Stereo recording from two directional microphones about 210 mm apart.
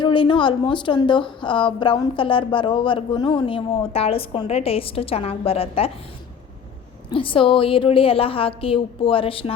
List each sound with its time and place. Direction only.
0.0 s a woman's voice: 25° left (ahead or behind)
7.1 s a woman's voice: 25° left (ahead or behind)